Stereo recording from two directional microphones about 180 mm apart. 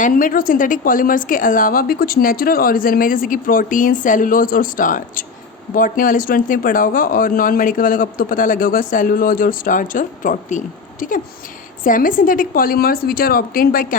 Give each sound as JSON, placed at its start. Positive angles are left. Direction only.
{"t": 0.0, "sound": "a woman's voice", "side_deg": 50}